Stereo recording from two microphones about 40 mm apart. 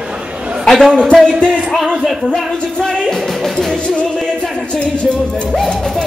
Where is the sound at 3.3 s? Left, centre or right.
Centre.